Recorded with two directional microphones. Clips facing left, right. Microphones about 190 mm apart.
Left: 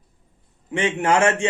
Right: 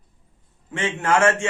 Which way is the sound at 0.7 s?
15° left (ahead or behind).